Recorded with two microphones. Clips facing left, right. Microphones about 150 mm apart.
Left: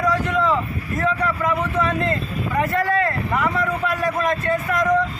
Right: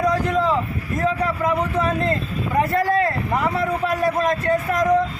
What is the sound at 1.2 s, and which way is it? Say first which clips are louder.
A man's voice: right 1 dB; 30° right (ahead or behind).